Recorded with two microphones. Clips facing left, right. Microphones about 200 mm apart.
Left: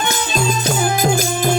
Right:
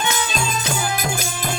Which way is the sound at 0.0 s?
55° left (ahead or behind).